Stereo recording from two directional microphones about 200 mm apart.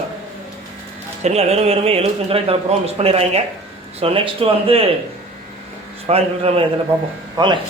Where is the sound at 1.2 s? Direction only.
30° right (ahead or behind).